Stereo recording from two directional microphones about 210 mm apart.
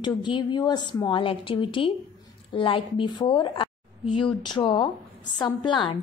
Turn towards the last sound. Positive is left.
turn(degrees=20)  # may be behind; listen again after turning